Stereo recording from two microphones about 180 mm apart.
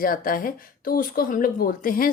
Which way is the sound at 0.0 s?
50° left (ahead or behind).